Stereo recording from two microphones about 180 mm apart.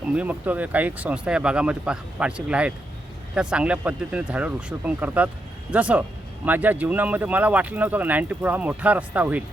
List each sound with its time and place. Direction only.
0.0 s speech: 5° right (ahead or behind)